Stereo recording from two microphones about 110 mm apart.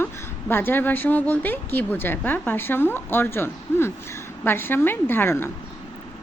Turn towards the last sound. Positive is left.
turn(degrees=20)  # may be behind; listen again after turning